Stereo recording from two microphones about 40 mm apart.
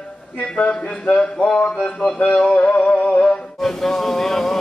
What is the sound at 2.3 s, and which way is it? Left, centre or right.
Music, left.